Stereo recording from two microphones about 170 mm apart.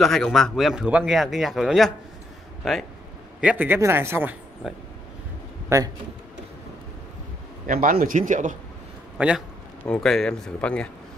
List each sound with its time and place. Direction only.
0.0 s speech: centre (ahead or behind)
3.3 s speech: 10° right (ahead or behind)
7.6 s a man's voice: 55° right (ahead or behind)
9.2 s speech: 10° right (ahead or behind)
9.8 s speech: centre (ahead or behind)